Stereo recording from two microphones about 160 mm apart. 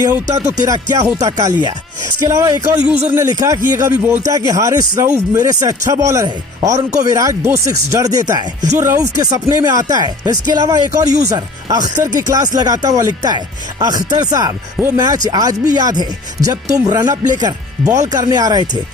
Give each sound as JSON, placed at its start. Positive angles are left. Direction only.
{"t": 0.0, "sound": "speech", "side_deg": -20}
{"t": 2.2, "sound": "speech", "side_deg": -20}